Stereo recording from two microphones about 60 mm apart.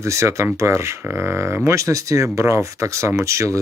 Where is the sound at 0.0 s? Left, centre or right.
Right.